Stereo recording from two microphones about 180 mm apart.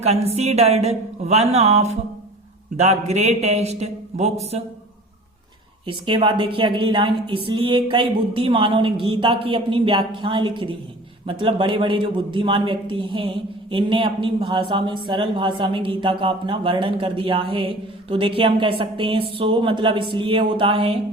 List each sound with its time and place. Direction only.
0.3 s speech: 35° right (ahead or behind)
5.8 s a man's voice: 30° right (ahead or behind)